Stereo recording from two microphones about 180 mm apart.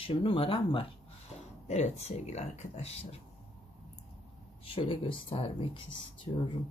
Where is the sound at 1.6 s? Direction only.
40° left (ahead or behind).